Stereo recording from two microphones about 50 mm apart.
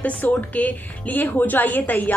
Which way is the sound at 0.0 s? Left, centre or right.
Left.